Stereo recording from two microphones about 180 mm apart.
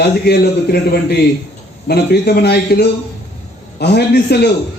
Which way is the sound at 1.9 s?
60° left (ahead or behind).